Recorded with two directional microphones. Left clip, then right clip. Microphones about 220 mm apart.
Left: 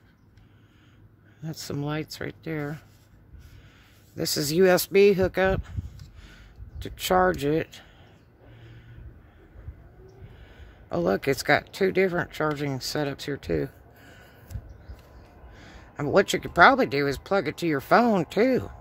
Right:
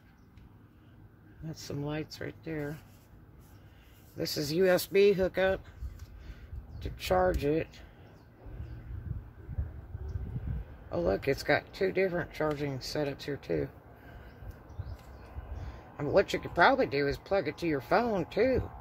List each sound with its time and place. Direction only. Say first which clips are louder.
1.4 s speech: left 6 dB; 50° left (ahead or behind)
4.2 s speech: left 7 dB; 45° left (ahead or behind)
6.8 s speech: left 6 dB; 45° left (ahead or behind)
10.9 s speech: left 5 dB; 45° left (ahead or behind)
16.0 s speech: left 5 dB; 45° left (ahead or behind)